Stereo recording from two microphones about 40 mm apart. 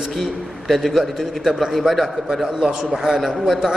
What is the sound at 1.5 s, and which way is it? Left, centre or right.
Speech, centre.